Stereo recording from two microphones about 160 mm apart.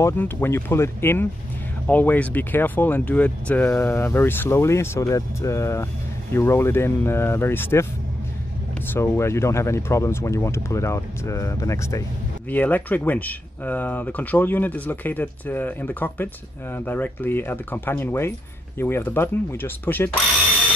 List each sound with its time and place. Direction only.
0.0 s speech: 15° left (ahead or behind)
8.8 s speech: 15° left (ahead or behind)